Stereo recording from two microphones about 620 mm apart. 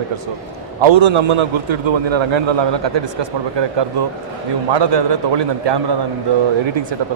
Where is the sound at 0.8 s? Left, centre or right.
Right.